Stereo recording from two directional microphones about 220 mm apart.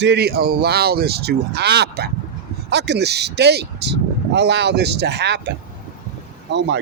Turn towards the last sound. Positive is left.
turn(degrees=-50)  # may be behind; listen again after turning